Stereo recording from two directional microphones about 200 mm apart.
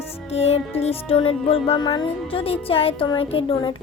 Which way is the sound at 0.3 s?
30° left (ahead or behind).